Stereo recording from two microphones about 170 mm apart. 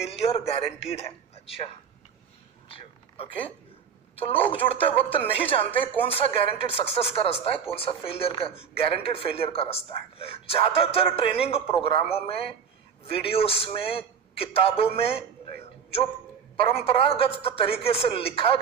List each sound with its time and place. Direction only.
0.0 s a man's voice: 35° left (ahead or behind)
2.7 s a sound: 35° left (ahead or behind)
4.1 s speech: 35° left (ahead or behind)
13.0 s a man's voice: 35° left (ahead or behind)